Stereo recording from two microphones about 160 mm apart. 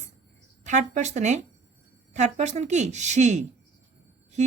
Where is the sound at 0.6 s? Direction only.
50° right (ahead or behind).